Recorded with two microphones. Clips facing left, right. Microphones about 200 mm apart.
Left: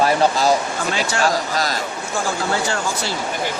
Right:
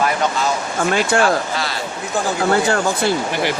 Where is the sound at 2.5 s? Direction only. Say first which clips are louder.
Right 5 dB; 55° right (ahead or behind).